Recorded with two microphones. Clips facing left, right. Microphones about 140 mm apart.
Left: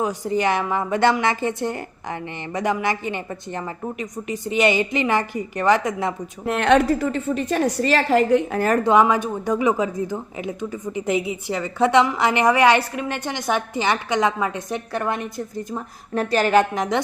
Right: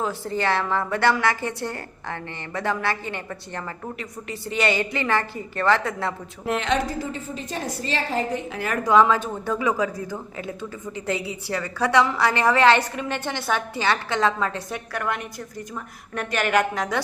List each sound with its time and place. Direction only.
0.0 s speech: 15° left (ahead or behind)
6.6 s a woman's voice: 60° left (ahead or behind)
8.5 s a woman's voice: 40° left (ahead or behind)
8.8 s a woman's voice: 20° left (ahead or behind)